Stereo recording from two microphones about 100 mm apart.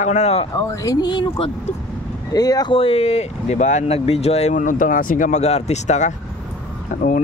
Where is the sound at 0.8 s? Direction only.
40° left (ahead or behind).